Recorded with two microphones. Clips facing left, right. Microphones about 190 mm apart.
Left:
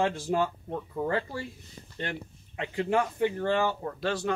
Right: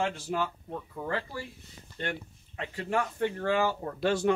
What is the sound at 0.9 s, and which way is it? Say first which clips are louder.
Speech: left 5 dB; 25° left (ahead or behind).